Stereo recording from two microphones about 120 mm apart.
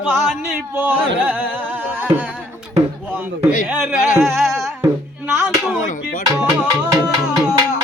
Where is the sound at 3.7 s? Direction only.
15° right (ahead or behind).